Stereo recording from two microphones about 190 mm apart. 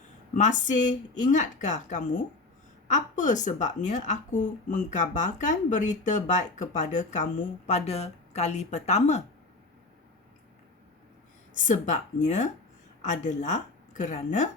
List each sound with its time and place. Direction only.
0.3 s a woman's voice: 40° left (ahead or behind)
11.5 s a woman's voice: 40° left (ahead or behind)